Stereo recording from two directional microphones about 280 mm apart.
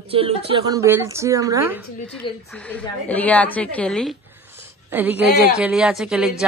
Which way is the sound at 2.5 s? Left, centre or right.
Centre.